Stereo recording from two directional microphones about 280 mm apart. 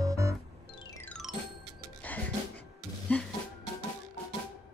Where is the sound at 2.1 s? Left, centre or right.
Centre.